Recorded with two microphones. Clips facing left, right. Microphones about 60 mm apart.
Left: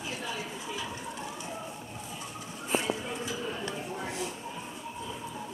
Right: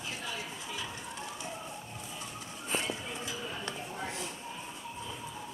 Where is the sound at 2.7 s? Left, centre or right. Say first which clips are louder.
Left 5 dB; centre.